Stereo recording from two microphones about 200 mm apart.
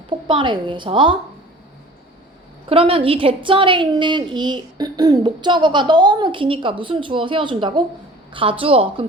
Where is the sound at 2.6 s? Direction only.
30° right (ahead or behind).